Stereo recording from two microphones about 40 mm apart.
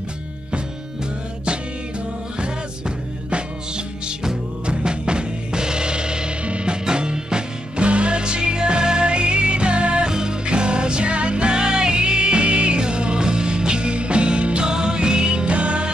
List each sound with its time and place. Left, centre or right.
3.3 s music: right